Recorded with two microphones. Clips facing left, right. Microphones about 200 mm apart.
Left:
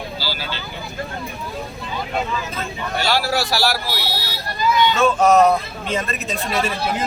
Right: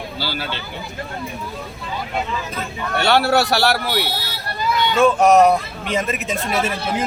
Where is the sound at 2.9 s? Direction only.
65° right (ahead or behind).